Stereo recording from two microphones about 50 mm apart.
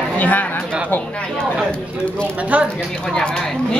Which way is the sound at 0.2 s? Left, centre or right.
Left.